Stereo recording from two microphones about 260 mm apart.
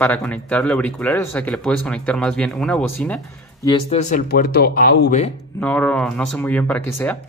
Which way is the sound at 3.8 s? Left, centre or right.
Left.